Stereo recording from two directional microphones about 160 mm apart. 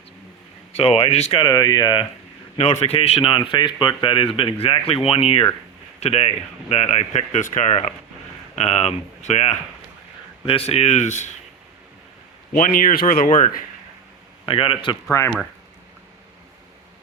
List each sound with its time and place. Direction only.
0.8 s speech: 40° left (ahead or behind)
1.4 s speech: 25° left (ahead or behind)
2.6 s speech: 40° left (ahead or behind)
12.5 s speech: 60° left (ahead or behind)
14.4 s speech: 35° left (ahead or behind)
15.1 s speech: 20° left (ahead or behind)